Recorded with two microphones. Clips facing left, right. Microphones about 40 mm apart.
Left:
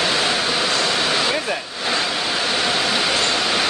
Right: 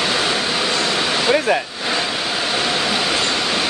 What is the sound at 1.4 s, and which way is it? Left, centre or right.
Speech, right.